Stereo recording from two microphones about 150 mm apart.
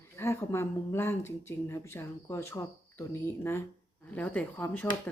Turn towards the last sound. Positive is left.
turn(degrees=10)  # may be behind; listen again after turning